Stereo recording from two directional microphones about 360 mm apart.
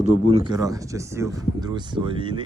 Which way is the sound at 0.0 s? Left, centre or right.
Centre.